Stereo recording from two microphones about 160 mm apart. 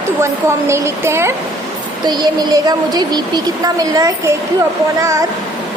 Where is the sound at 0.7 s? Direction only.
15° right (ahead or behind).